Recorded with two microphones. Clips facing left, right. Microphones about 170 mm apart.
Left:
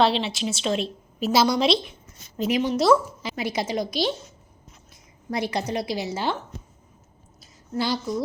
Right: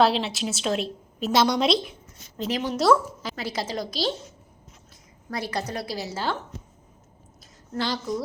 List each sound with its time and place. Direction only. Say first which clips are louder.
0.0 s a woman's voice: even; centre (ahead or behind)
2.4 s a woman's voice: left 3 dB; 15° left (ahead or behind)
5.3 s a woman's voice: left 4 dB; 20° left (ahead or behind)
7.7 s a woman's voice: left 2 dB; 10° left (ahead or behind)